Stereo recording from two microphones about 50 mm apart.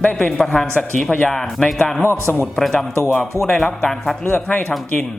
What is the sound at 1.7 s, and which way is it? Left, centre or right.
Speech, centre.